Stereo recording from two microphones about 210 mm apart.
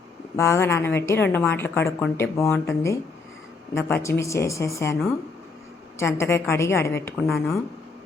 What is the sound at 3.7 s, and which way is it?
A woman's voice, 10° left (ahead or behind).